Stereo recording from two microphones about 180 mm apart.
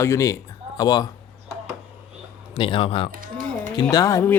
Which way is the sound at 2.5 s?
30° left (ahead or behind).